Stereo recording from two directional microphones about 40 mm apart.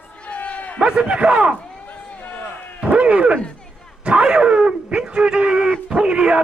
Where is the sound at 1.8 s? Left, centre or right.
Left.